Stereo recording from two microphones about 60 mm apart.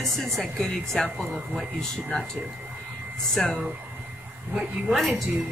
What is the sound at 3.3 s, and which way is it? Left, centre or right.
Speech, centre.